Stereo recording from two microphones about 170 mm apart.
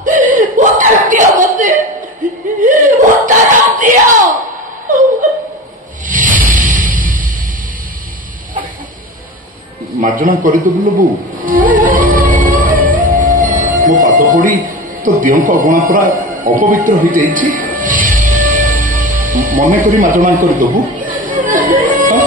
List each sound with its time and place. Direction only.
0.0 s a sound: 50° right (ahead or behind)
4.9 s laughter: 50° right (ahead or behind)
6.0 s a sound: 50° right (ahead or behind)
10.2 s a man's voice: 55° right (ahead or behind)
11.7 s music: 50° right (ahead or behind)
15.0 s speech: 50° right (ahead or behind)
17.0 s music: 50° right (ahead or behind)